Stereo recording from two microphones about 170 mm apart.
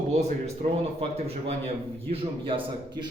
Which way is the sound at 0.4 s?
40° right (ahead or behind).